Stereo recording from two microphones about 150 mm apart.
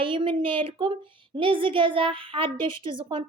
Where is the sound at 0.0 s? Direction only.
35° right (ahead or behind).